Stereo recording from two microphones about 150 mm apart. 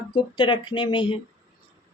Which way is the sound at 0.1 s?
30° left (ahead or behind).